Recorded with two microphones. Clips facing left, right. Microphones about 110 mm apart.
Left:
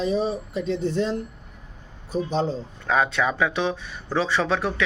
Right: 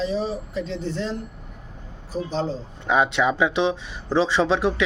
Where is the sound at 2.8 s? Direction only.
20° right (ahead or behind).